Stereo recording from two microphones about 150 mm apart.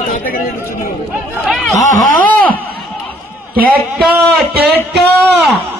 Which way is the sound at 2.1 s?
65° right (ahead or behind).